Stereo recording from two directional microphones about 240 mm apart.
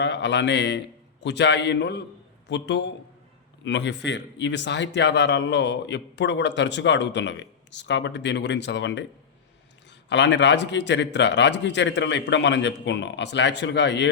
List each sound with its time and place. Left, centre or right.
0.0 s speech: left
10.1 s speech: left